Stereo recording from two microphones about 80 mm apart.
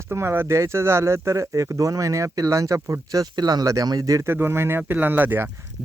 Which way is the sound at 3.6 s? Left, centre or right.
Right.